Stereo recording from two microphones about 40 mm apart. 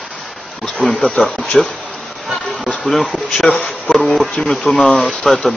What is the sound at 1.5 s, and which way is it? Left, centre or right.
Speech, centre.